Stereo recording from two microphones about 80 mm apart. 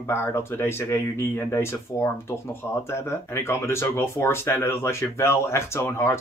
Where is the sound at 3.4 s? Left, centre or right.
Left.